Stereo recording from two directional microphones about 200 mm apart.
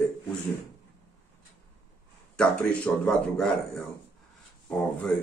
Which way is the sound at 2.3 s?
5° left (ahead or behind).